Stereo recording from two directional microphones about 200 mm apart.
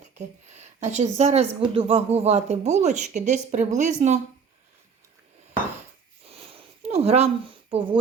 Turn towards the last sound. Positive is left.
turn(degrees=-25)  # may be behind; listen again after turning